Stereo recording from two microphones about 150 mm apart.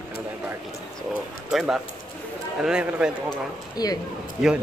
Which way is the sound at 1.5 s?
Centre (ahead or behind).